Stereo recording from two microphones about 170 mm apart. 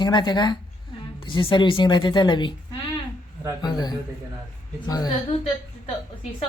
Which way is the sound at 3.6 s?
25° left (ahead or behind).